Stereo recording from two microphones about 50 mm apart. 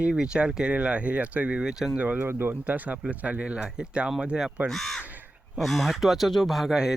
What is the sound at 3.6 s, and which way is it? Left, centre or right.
Speech, centre.